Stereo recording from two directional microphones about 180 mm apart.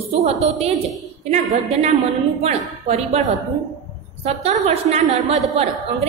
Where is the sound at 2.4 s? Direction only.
35° right (ahead or behind).